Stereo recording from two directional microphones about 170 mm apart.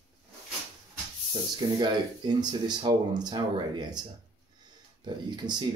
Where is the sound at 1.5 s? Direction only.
25° right (ahead or behind).